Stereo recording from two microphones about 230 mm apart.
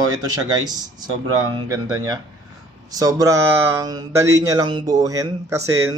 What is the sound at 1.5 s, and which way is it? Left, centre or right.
Speech, centre.